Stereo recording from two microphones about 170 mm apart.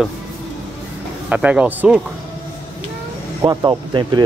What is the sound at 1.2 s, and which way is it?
Speech, 5° right (ahead or behind).